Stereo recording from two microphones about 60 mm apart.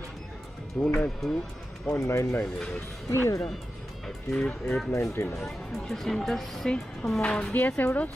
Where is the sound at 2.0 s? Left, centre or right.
Left.